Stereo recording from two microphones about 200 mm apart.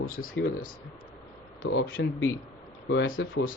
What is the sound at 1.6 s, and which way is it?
Speech, 70° left (ahead or behind).